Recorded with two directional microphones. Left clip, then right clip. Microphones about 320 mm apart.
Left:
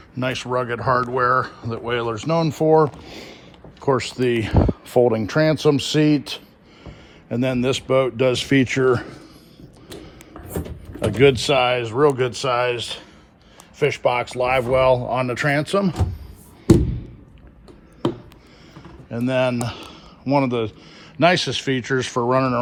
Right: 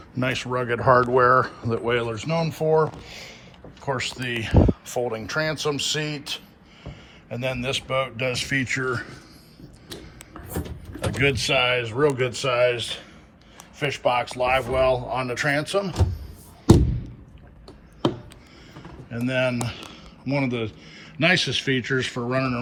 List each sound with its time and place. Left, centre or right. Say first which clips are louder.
0.2 s a man's voice: left 3 dB; centre
2.4 s speech: left 5 dB; left
11.1 s a man's voice: left 6 dB; centre
13.7 s speech: left 3 dB; left
19.1 s a man's voice: left 4 dB; centre